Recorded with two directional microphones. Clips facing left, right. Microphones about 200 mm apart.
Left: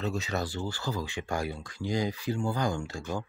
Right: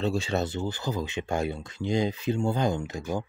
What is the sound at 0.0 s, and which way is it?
Speech, 30° right (ahead or behind).